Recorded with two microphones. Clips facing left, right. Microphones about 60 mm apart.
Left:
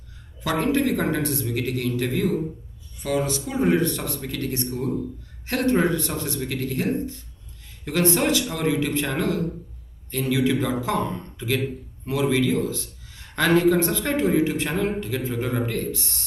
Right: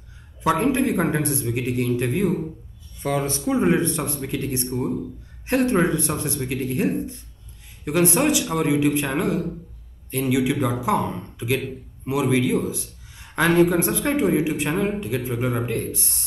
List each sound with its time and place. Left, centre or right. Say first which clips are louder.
0.4 s a man's voice: right 2 dB; right
3.0 s a man's voice: even; right; by 16.3 s centre